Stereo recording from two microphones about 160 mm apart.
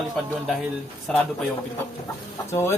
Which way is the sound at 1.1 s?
5° left (ahead or behind).